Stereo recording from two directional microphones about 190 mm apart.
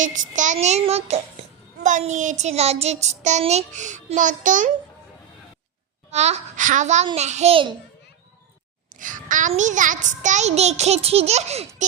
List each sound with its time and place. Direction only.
0.0 s a child's voice: 40° right (ahead or behind)
6.1 s a child's voice: 35° right (ahead or behind)
8.9 s a child's voice: 45° right (ahead or behind)